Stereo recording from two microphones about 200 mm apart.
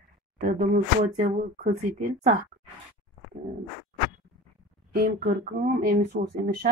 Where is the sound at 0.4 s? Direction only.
45° right (ahead or behind).